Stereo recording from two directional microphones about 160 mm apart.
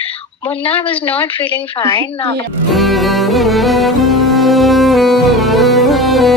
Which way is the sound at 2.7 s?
Centre (ahead or behind).